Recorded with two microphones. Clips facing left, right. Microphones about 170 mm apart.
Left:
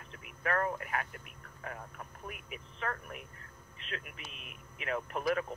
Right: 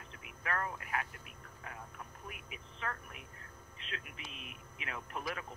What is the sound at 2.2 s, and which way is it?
Speech, 50° left (ahead or behind).